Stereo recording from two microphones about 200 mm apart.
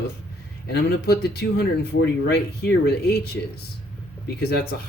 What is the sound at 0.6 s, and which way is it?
Speech, 55° left (ahead or behind).